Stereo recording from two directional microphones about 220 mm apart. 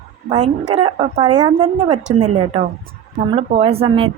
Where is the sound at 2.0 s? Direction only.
30° right (ahead or behind).